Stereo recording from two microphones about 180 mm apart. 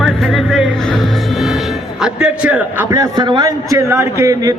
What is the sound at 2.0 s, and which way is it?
Speech, 5° right (ahead or behind).